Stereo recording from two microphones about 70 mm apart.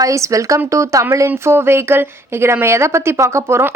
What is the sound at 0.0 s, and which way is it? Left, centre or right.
Speech, right.